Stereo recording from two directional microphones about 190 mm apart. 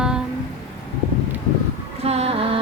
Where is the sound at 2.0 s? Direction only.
35° right (ahead or behind).